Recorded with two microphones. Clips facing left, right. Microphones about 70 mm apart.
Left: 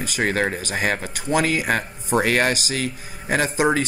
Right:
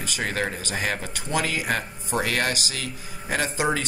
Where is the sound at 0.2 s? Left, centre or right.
Left.